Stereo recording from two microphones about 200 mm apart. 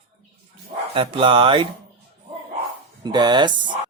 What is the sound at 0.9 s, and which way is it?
Speech, 25° right (ahead or behind).